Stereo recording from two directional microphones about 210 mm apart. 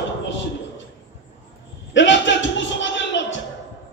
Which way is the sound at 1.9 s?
60° left (ahead or behind).